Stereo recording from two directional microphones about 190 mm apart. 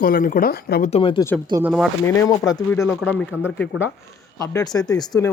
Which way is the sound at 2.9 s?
5° left (ahead or behind).